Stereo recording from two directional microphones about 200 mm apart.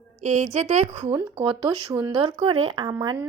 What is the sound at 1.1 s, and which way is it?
Speech, 20° right (ahead or behind).